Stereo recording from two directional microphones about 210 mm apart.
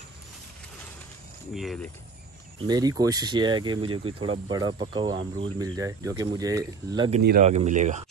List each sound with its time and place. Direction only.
1.5 s speech: centre (ahead or behind)
2.6 s speech: 20° right (ahead or behind)
7.4 s speech: 30° right (ahead or behind)